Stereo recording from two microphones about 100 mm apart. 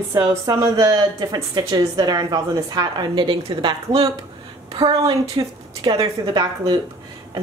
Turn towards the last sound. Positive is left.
turn(degrees=-45)  # may be behind; listen again after turning